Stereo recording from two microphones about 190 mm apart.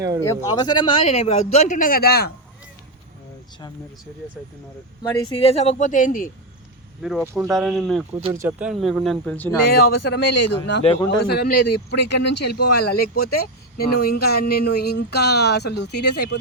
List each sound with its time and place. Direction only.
0.2 s a man's voice: 20° left (ahead or behind)
1.0 s speech: 35° left (ahead or behind); by 2.3 s 55° left (ahead or behind)
5.1 s speech: 30° left (ahead or behind); by 6.3 s 45° left (ahead or behind)
7.0 s speech: 5° right (ahead or behind)
8.3 s speech: 10° right (ahead or behind); by 9.5 s 5° left (ahead or behind)
9.7 s speech: 55° left (ahead or behind)
10.8 s a man's voice: 25° left (ahead or behind)
11.3 s speech: 55° left (ahead or behind)